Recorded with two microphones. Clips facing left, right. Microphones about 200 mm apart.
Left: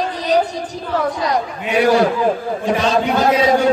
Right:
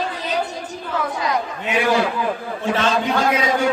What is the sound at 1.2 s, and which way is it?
Speech, 35° left (ahead or behind).